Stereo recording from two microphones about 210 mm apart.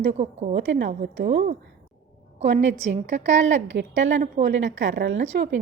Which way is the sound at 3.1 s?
35° right (ahead or behind).